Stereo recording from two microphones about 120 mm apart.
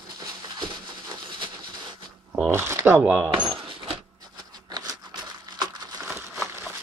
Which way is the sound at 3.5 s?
45° right (ahead or behind).